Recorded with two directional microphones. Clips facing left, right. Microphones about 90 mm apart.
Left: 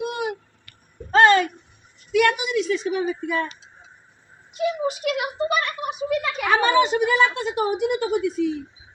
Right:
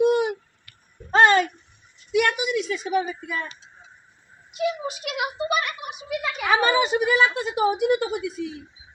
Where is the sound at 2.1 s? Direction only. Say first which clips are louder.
Left 2 dB; 15° right (ahead or behind).